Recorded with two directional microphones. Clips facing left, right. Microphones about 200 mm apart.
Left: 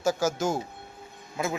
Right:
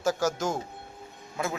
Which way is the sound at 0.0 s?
Centre (ahead or behind).